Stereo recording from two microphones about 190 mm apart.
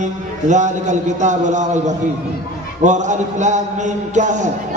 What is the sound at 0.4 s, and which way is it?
A man's voice, 40° right (ahead or behind).